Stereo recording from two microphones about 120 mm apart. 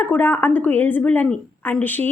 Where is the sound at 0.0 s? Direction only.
15° left (ahead or behind).